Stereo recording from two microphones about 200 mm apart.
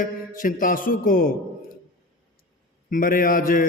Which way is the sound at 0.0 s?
45° left (ahead or behind).